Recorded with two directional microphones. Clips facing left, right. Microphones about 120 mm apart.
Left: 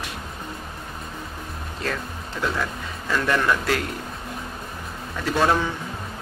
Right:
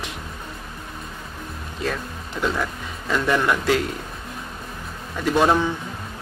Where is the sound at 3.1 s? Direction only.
15° right (ahead or behind).